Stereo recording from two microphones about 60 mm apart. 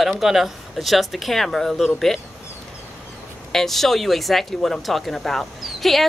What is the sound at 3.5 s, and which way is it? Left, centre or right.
Speech, centre.